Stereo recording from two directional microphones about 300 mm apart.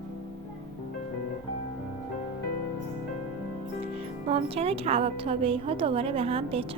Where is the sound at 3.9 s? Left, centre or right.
Centre.